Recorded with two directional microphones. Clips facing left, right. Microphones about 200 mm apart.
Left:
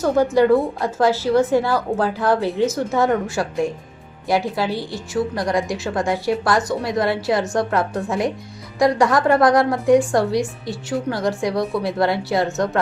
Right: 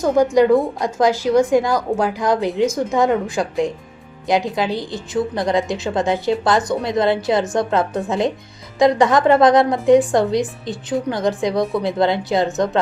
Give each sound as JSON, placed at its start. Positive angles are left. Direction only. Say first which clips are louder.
{"t": 0.0, "sound": "a woman's voice", "louder": "right 2 dB", "side_deg": -15}